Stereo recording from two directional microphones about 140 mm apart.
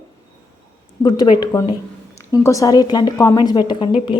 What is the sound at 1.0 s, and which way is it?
Speech, 30° left (ahead or behind).